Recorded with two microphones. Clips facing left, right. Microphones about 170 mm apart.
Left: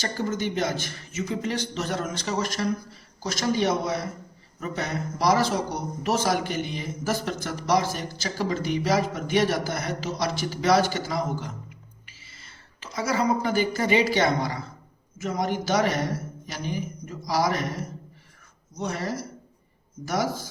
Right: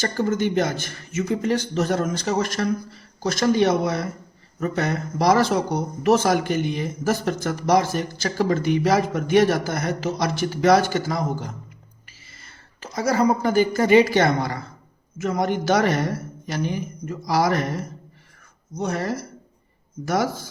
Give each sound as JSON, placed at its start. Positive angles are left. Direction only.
{"t": 0.0, "sound": "a man's voice", "side_deg": -55}
{"t": 18.8, "sound": "a man's voice", "side_deg": -50}